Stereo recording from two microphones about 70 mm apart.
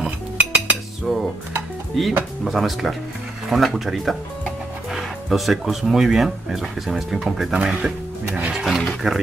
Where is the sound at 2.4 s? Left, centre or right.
Centre.